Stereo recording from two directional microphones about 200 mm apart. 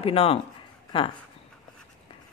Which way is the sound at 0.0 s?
30° left (ahead or behind).